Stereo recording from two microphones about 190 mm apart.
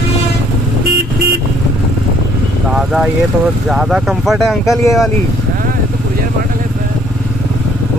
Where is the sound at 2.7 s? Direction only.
Centre (ahead or behind).